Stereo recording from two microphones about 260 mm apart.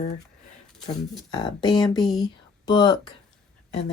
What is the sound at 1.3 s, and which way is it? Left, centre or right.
Speech, centre.